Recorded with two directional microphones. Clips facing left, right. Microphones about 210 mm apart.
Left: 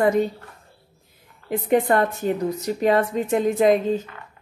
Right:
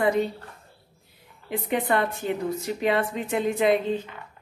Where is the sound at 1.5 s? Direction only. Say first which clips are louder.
Left 6 dB; 45° left (ahead or behind).